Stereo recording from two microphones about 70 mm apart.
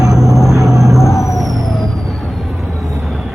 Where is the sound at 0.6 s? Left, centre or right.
Centre.